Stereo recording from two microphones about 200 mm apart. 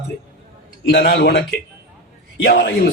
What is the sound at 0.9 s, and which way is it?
Speech, 50° left (ahead or behind).